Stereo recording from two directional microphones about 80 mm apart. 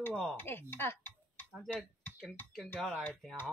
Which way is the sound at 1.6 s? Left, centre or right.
Centre.